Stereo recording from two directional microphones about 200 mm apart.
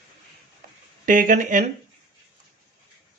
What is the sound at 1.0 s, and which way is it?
Speech, 40° right (ahead or behind).